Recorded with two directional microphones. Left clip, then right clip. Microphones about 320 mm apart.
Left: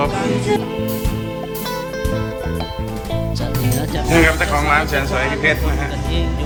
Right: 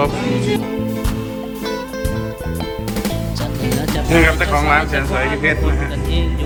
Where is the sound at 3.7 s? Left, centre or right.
Centre.